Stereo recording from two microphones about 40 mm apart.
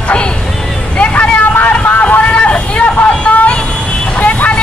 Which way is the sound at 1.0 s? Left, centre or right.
Left.